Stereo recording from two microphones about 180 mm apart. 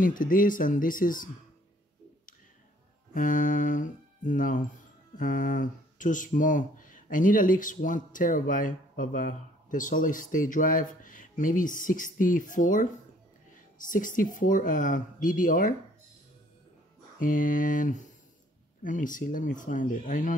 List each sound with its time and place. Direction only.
0.0 s speech: 50° left (ahead or behind)
3.2 s speech: 50° left (ahead or behind)
13.8 s speech: 45° left (ahead or behind)
17.2 s speech: 45° left (ahead or behind)